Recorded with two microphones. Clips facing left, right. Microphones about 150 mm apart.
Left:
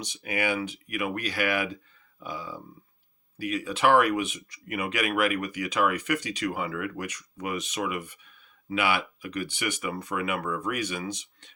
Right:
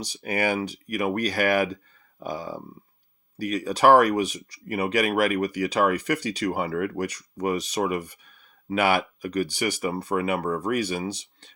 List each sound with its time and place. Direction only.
0.0 s speech: 35° right (ahead or behind)